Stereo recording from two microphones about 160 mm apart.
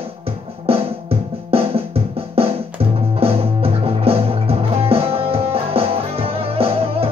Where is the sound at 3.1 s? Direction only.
35° right (ahead or behind).